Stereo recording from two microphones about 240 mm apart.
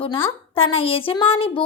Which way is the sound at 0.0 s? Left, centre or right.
Left.